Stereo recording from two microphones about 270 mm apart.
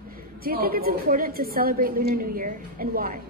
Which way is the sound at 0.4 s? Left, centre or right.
Right.